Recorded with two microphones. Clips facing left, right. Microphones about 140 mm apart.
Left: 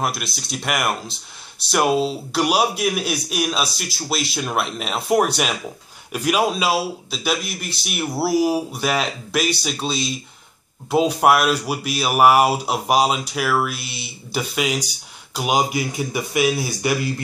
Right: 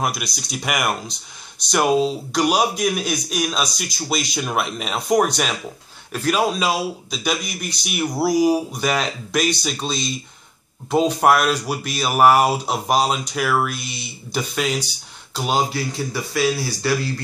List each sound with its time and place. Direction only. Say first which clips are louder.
0.0 s a man's voice: even; centre (ahead or behind); by 17.1 s 20° left (ahead or behind)